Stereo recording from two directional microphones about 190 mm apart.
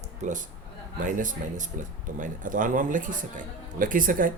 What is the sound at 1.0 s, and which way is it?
Speech, 45° right (ahead or behind).